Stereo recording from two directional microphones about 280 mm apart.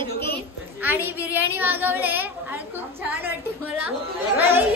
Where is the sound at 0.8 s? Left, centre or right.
Centre.